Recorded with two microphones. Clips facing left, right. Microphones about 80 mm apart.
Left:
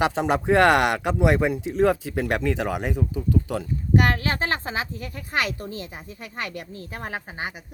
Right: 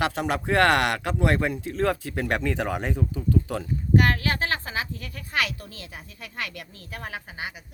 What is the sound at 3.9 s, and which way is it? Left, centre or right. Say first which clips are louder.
Speech: left 1 dB; left.